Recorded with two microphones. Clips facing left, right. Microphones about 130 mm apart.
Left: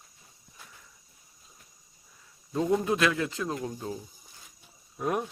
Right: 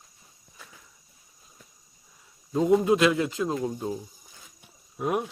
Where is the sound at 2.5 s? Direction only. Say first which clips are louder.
Right 5 dB; 15° right (ahead or behind).